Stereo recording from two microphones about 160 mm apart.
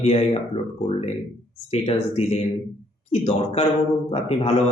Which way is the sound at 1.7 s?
40° left (ahead or behind).